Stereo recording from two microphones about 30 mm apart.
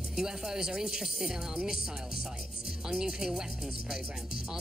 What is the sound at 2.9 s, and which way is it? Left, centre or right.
Speech, right.